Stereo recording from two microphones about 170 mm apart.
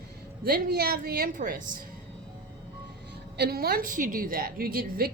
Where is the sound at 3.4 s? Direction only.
65° right (ahead or behind).